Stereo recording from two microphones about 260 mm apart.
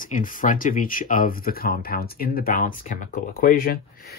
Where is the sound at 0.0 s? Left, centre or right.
Left.